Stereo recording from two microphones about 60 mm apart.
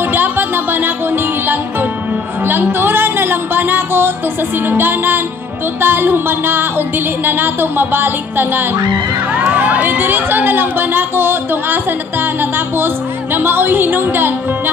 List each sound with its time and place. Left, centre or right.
0.1 s music: right
4.6 s speech: right
9.4 s speech: right